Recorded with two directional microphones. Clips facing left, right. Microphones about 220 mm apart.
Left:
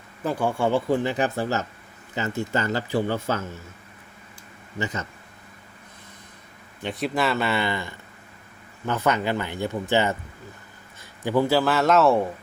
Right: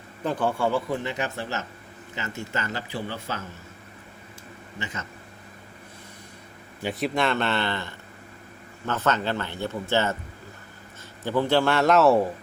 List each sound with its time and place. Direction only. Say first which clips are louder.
0.3 s speech: left 1 dB; 10° left (ahead or behind)
0.7 s speech: left 5 dB; 30° left (ahead or behind); by 3.4 s 45° left (ahead or behind)
6.8 s speech: even; centre (ahead or behind)
11.2 s a man's voice: left 1 dB; 15° left (ahead or behind)